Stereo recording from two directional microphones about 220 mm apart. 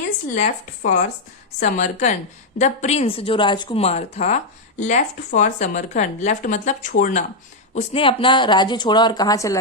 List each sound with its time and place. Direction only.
0.3 s speech: 35° left (ahead or behind); by 9.6 s 15° left (ahead or behind)